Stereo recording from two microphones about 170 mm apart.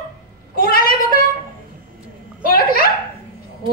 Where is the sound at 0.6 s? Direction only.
60° left (ahead or behind).